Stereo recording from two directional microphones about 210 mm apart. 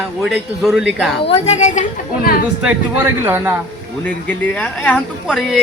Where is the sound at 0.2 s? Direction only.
Centre (ahead or behind).